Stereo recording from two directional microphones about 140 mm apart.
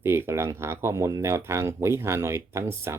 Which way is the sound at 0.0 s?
15° right (ahead or behind).